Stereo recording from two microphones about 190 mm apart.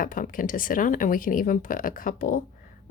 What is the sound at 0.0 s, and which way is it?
Speech, 45° left (ahead or behind).